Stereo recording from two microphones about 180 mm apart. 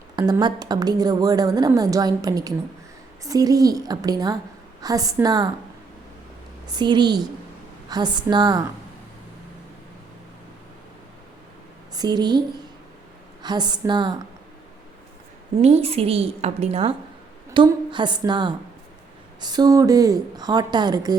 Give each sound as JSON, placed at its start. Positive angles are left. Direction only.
{"t": 0.2, "sound": "a woman's voice", "side_deg": -25}
{"t": 6.7, "sound": "a woman's voice", "side_deg": -25}
{"t": 11.9, "sound": "a woman's voice", "side_deg": -25}
{"t": 13.4, "sound": "a woman's voice", "side_deg": -25}
{"t": 15.6, "sound": "a woman's voice", "side_deg": -35}